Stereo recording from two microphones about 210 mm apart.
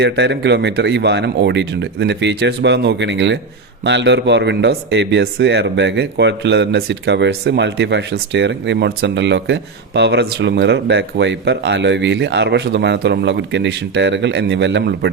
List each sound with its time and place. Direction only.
0.0 s a man's voice: 55° right (ahead or behind)